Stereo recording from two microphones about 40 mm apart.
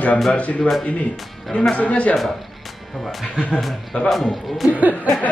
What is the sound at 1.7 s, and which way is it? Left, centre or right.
Speech, left.